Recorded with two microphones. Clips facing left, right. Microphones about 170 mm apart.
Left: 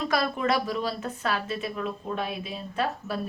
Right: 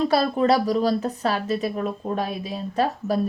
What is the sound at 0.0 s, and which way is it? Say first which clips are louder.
A woman's voice: right 7 dB; 35° right (ahead or behind).